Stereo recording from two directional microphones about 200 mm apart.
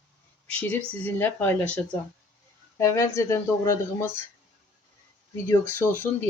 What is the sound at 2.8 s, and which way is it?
Speech, 15° left (ahead or behind).